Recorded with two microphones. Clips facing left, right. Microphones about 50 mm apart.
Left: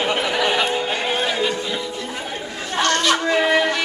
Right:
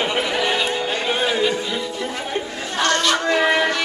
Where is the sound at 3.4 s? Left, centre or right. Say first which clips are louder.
Even; centre.